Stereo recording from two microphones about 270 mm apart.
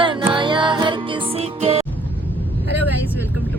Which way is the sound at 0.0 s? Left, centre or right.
Centre.